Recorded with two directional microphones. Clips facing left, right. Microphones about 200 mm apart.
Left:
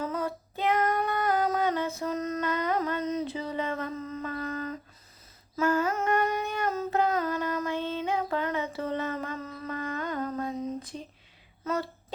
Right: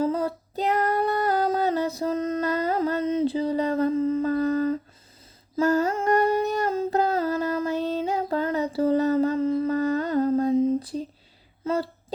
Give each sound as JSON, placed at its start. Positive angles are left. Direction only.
{"t": 0.0, "sound": "female singing", "side_deg": -30}
{"t": 5.6, "sound": "humming", "side_deg": -40}
{"t": 11.6, "sound": "a sound", "side_deg": -30}